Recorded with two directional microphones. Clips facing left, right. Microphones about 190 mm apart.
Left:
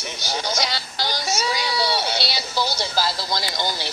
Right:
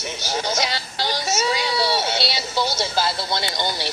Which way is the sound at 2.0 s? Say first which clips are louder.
Right 2 dB; 20° right (ahead or behind).